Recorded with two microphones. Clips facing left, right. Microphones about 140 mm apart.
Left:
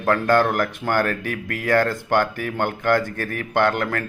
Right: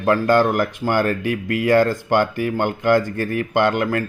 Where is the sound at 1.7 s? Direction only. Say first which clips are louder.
Right 3 dB; 15° right (ahead or behind).